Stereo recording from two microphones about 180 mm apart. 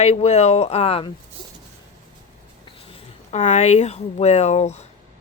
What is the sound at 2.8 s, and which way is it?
Speech, 30° left (ahead or behind).